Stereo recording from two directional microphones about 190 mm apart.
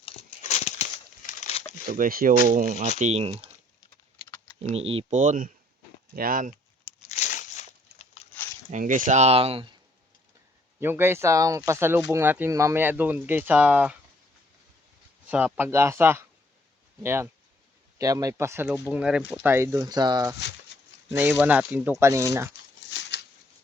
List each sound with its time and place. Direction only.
0.0 s a sound: 30° left (ahead or behind)
1.9 s speech: 50° right (ahead or behind)
3.0 s speech: 35° right (ahead or behind)
4.7 s speech: 30° right (ahead or behind)
7.1 s a sound: 40° left (ahead or behind)
8.7 s speech: 45° right (ahead or behind)
10.8 s speech: 10° right (ahead or behind)
15.3 s speech: 10° right (ahead or behind)
21.2 s speech: 10° right (ahead or behind)
22.9 s a sound: 65° left (ahead or behind)